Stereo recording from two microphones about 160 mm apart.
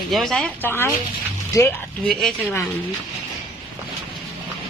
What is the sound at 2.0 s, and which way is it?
Speech, 5° left (ahead or behind).